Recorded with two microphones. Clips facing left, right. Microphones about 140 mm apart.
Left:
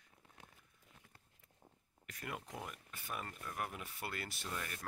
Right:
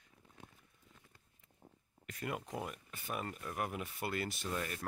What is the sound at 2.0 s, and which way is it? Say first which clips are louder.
Speech: right 5 dB; 25° right (ahead or behind).